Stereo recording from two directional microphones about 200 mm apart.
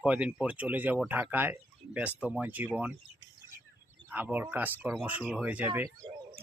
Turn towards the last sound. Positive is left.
turn(degrees=-10)  # may be behind; listen again after turning